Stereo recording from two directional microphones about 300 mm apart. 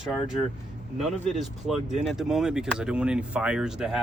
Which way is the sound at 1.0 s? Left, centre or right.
Centre.